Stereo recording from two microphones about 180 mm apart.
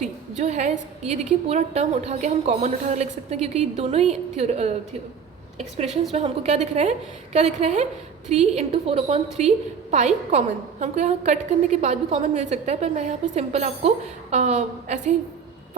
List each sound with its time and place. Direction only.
0.0 s a woman's voice: 40° right (ahead or behind)